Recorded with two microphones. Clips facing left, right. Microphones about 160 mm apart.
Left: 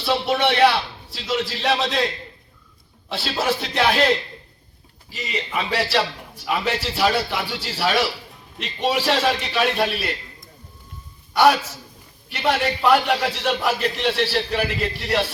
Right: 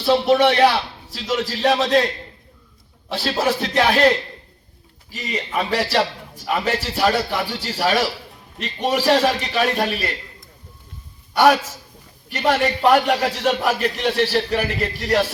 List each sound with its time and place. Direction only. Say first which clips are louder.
0.0 s a man's voice: right 5 dB; 45° right (ahead or behind)
3.1 s a man's voice: right 3 dB; 45° right (ahead or behind)
5.1 s a man's voice: right 2 dB; 45° right (ahead or behind)
12.3 s a man's voice: right 3 dB; 45° right (ahead or behind)